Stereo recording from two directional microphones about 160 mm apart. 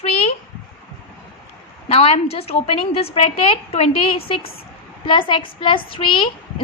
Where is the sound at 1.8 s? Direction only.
35° left (ahead or behind).